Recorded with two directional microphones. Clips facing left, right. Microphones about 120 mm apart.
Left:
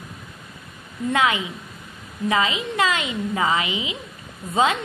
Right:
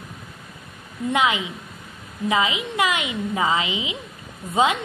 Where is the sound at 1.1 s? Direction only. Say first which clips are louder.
Even; 20° right (ahead or behind).